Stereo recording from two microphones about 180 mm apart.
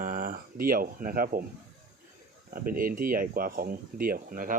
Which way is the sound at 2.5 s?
55° right (ahead or behind).